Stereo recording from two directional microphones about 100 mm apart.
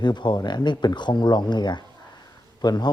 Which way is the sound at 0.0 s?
50° left (ahead or behind).